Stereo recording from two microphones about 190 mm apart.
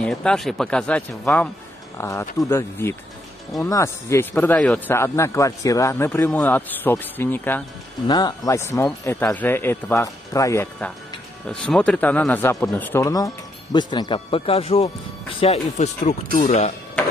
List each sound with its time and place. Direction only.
0.0 s speech: 5° left (ahead or behind); by 16.7 s 35° left (ahead or behind)